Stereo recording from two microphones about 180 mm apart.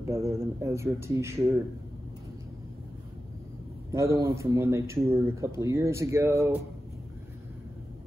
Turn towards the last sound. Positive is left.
turn(degrees=-15)  # may be behind; listen again after turning